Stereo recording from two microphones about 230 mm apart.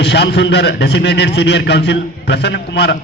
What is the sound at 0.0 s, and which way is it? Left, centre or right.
A man's voice, left.